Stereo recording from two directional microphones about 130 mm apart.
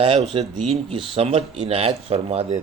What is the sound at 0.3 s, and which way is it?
A man's voice, 40° right (ahead or behind).